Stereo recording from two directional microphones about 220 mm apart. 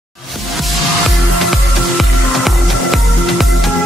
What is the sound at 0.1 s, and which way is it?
Music, centre (ahead or behind).